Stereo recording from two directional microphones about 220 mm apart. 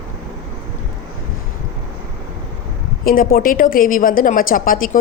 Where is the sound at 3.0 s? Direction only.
40° left (ahead or behind).